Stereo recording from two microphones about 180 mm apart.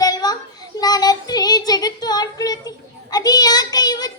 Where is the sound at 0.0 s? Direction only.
20° left (ahead or behind).